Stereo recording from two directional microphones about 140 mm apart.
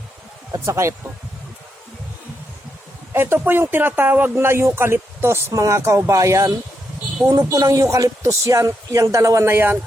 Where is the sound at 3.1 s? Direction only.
15° right (ahead or behind).